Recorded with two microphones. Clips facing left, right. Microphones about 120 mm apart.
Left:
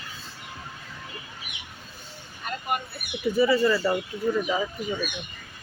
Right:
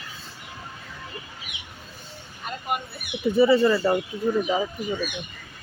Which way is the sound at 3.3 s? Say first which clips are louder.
Right 3 dB; 25° right (ahead or behind).